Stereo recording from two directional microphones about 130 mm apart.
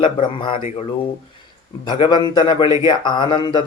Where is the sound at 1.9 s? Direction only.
35° left (ahead or behind).